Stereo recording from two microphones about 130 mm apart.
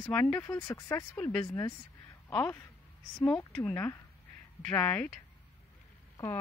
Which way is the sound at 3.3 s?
5° left (ahead or behind).